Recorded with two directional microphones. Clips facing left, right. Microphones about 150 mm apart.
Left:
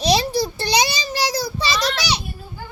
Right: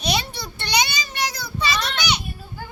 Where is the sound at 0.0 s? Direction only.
35° left (ahead or behind).